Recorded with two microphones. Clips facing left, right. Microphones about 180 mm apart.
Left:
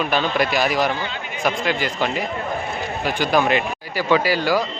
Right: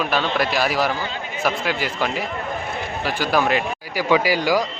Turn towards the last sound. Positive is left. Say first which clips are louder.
# even
turn(degrees=-15)  # may be behind; listen again after turning